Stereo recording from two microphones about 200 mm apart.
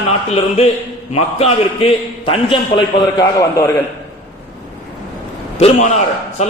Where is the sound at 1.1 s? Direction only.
30° left (ahead or behind); by 3.7 s 15° left (ahead or behind).